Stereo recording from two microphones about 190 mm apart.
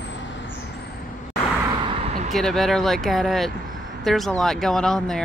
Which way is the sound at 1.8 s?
35° right (ahead or behind).